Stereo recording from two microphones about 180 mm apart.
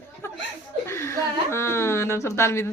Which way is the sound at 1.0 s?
15° left (ahead or behind).